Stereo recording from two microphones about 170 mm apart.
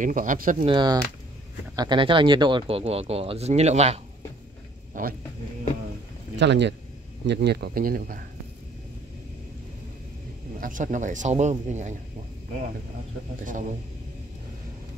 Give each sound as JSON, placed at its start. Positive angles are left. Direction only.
{"t": 0.0, "sound": "speech", "side_deg": -50}
{"t": 0.7, "sound": "speech", "side_deg": -25}
{"t": 4.9, "sound": "speech", "side_deg": -50}
{"t": 6.3, "sound": "speech", "side_deg": -90}
{"t": 7.2, "sound": "speech", "side_deg": -75}
{"t": 10.6, "sound": "speech", "side_deg": -50}
{"t": 13.4, "sound": "speech", "side_deg": -50}